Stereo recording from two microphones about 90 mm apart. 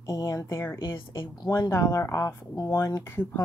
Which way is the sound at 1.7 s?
35° left (ahead or behind).